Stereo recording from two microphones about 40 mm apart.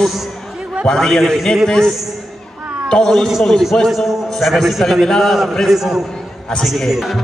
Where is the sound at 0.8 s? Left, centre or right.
Centre.